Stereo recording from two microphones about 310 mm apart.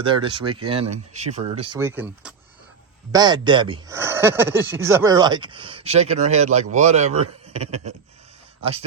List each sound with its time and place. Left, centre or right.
0.0 s speech: centre